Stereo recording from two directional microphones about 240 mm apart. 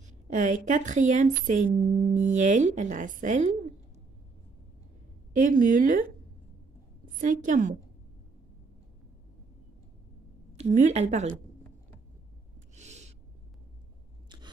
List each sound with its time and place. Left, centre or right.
0.0 s a woman's voice: right
5.3 s a woman's voice: right
7.2 s a woman's voice: right
10.5 s a woman's voice: right
12.7 s owl: right